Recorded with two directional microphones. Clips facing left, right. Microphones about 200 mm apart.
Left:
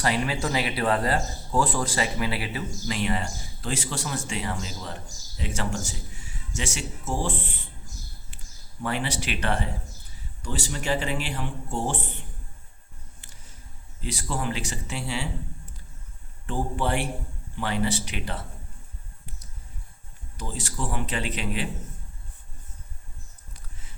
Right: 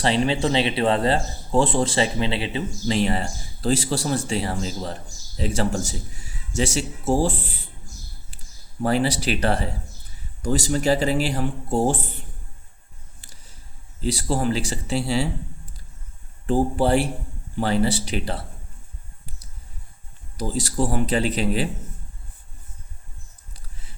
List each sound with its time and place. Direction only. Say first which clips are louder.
0.0 s speech: right 5 dB; 25° right (ahead or behind)
8.8 s speech: right 8 dB; 35° right (ahead or behind)
13.2 s a sound: right 1 dB; 35° right (ahead or behind)
14.0 s speech: right 7 dB; 35° right (ahead or behind)
16.5 s speech: right 8 dB; 35° right (ahead or behind)
20.3 s speech: right 9 dB; 35° right (ahead or behind)